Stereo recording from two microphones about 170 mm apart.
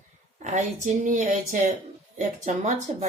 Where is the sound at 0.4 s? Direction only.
45° right (ahead or behind).